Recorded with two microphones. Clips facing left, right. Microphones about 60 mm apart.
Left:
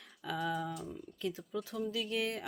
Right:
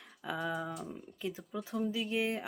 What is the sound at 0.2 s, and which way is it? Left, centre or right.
Speech, right.